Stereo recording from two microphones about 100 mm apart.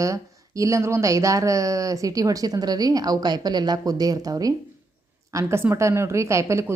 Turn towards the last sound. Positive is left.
turn(degrees=-30)  # may be behind; listen again after turning